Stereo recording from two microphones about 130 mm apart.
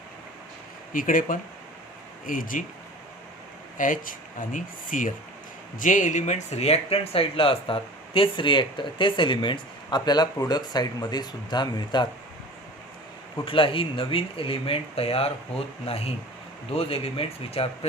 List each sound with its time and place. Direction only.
0.9 s speech: 90° left
3.8 s speech: 90° left
5.8 s speech: 75° left (ahead or behind); by 12.0 s 35° left (ahead or behind)
13.4 s speech: 45° left (ahead or behind)